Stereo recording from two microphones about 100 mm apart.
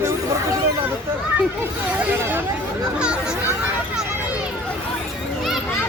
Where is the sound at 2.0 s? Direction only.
15° right (ahead or behind).